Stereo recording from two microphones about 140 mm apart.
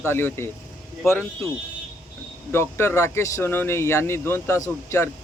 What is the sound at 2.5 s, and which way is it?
Speech, 15° left (ahead or behind).